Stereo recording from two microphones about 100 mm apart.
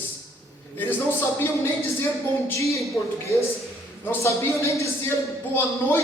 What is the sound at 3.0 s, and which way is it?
A man's voice, 25° left (ahead or behind).